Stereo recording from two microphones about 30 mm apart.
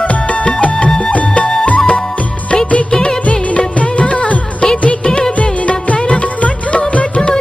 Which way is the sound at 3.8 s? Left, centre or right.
Left.